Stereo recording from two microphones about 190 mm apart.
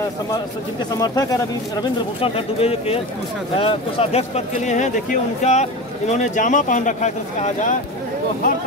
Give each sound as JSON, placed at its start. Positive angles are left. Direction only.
{"t": 0.9, "sound": "speech", "side_deg": 20}
{"t": 2.2, "sound": "speech", "side_deg": 30}